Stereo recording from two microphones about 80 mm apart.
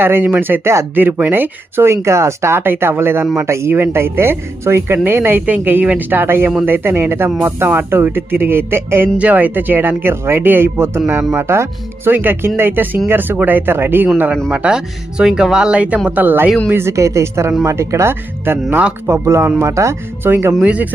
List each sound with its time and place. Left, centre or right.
0.0 s speech: right
0.9 s speech: right
5.8 s speech: centre
6.1 s speech: right
9.1 s speech: centre
14.5 s speech: centre; by 20.5 s right
20.6 s speech: centre